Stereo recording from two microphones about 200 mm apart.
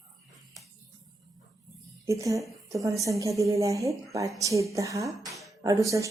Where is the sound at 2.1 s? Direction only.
15° right (ahead or behind).